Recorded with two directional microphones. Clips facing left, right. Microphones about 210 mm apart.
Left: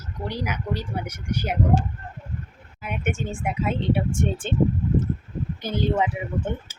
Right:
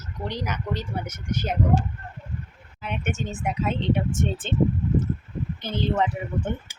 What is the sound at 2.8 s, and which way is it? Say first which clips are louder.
Speech: left 1 dB; 10° left (ahead or behind).